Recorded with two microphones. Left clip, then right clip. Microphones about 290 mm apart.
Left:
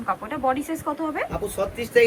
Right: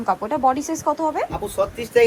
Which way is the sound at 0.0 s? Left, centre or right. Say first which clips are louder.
Right 6 dB; centre.